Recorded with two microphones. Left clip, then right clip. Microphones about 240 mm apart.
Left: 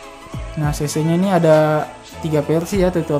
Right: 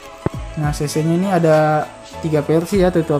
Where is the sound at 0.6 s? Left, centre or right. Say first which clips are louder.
Right 1 dB; centre.